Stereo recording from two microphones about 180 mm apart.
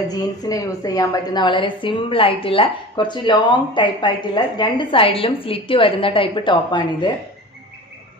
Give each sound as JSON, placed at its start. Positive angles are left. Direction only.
{"t": 0.1, "sound": "a woman's voice", "side_deg": 20}